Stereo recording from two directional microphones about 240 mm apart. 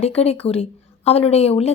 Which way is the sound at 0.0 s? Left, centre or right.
Left.